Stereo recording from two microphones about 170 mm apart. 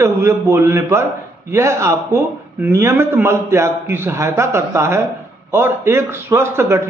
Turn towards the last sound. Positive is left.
turn(degrees=-15)  # may be behind; listen again after turning